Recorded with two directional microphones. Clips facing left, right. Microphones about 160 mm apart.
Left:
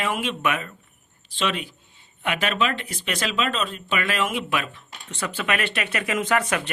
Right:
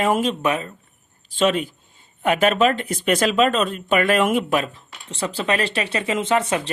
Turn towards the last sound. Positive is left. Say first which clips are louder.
# right 3 dB
turn(degrees=-25)  # may be behind; listen again after turning